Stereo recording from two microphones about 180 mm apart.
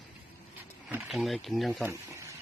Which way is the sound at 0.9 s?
Centre (ahead or behind).